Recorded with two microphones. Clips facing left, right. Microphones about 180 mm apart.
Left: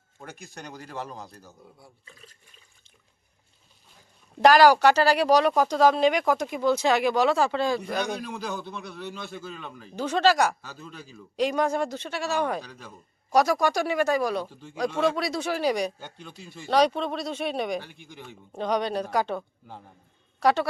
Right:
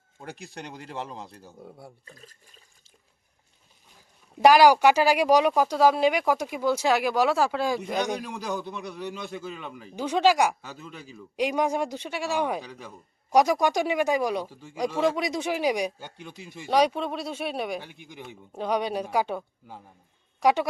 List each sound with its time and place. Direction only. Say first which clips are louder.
0.2 s speech: right 2 dB; 35° right (ahead or behind)
2.0 s speech: right 3 dB; 40° right (ahead or behind)
4.4 s speech: even; 10° right (ahead or behind)
17.8 s speech: right 2 dB; 15° right (ahead or behind)